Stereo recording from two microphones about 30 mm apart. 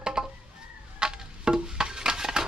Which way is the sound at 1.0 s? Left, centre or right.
Right.